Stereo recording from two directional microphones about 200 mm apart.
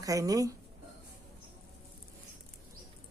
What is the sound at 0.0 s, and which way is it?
Speech, 15° right (ahead or behind).